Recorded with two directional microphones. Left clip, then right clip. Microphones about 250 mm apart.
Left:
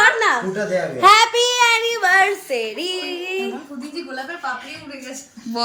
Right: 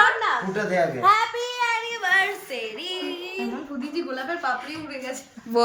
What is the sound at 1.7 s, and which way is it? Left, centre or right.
Child singing, left.